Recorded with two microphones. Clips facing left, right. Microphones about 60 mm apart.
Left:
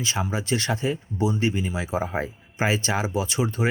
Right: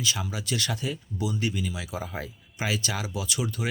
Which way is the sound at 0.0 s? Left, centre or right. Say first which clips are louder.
Left 4 dB; left.